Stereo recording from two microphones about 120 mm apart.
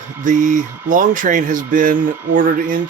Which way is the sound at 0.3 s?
90° right.